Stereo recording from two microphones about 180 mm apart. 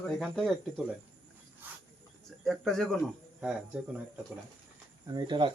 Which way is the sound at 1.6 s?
10° right (ahead or behind).